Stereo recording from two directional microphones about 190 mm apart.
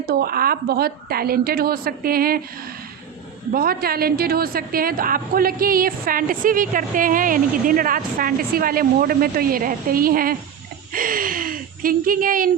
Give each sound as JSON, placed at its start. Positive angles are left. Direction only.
{"t": 0.0, "sound": "a woman's voice", "side_deg": -50}
{"t": 3.5, "sound": "a woman's voice", "side_deg": -50}